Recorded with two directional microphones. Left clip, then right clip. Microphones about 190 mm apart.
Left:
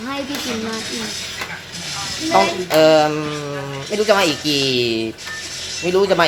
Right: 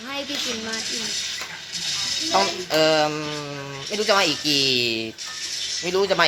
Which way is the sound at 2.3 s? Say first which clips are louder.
Left 7 dB; 15° right (ahead or behind).